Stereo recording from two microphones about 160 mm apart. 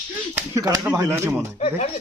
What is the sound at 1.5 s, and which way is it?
Speech, 40° left (ahead or behind).